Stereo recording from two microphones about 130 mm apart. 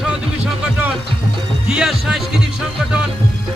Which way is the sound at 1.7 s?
5° right (ahead or behind).